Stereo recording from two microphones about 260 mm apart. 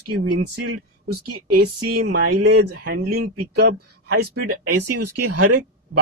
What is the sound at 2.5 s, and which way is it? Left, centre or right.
Speech, right.